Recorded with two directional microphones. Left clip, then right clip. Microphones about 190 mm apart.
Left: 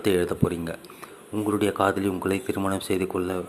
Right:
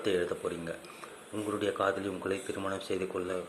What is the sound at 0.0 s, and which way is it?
Speech, 25° left (ahead or behind).